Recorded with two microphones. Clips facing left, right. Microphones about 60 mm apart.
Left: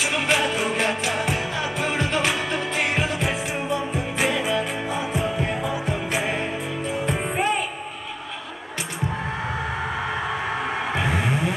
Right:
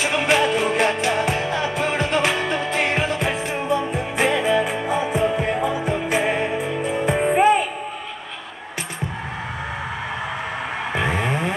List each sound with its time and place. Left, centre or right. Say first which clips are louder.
0.0 s music: right 3 dB; centre
11.0 s vehicle: right 4 dB; centre